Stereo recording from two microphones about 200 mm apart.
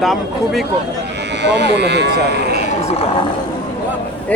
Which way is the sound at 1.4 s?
60° right (ahead or behind).